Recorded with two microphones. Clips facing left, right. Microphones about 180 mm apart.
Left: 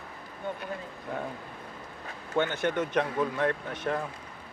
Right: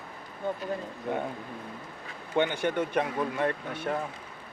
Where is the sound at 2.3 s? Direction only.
15° right (ahead or behind).